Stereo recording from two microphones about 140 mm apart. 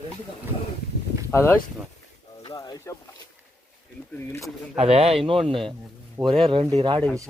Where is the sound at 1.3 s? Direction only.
20° left (ahead or behind).